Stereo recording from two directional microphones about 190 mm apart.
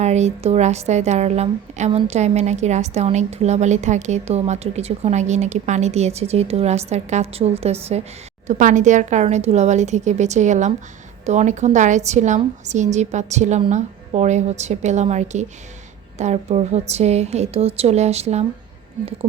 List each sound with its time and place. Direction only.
0.0 s a woman's voice: 35° right (ahead or behind)